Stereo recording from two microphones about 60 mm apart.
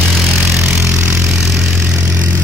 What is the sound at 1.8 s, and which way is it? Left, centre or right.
Vehicle, centre.